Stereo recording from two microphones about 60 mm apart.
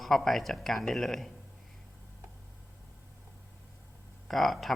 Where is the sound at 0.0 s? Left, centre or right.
Centre.